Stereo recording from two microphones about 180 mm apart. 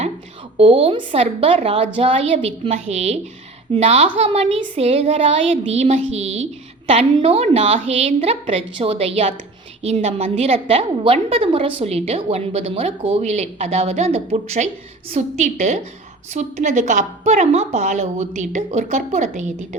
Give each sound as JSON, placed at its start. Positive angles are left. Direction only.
{"t": 0.5, "sound": "a woman's voice", "side_deg": -30}